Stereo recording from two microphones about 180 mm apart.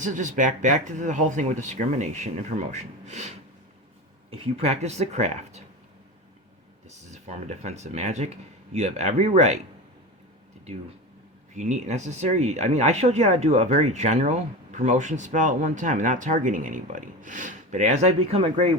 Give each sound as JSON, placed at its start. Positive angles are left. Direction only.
{"t": 0.0, "sound": "speech", "side_deg": -45}
{"t": 7.1, "sound": "speech", "side_deg": -40}
{"t": 11.5, "sound": "speech", "side_deg": -40}